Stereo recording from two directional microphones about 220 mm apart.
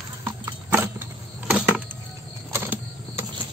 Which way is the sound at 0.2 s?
15° right (ahead or behind).